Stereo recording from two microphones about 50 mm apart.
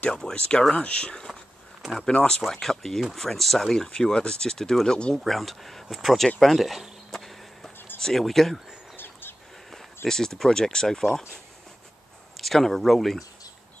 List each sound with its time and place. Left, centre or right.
0.1 s speech: centre
2.4 s speech: centre
5.1 s speech: centre
6.4 s a sound: centre
8.0 s speech: centre
8.9 s bird: left
10.0 s speech: centre
12.4 s speech: centre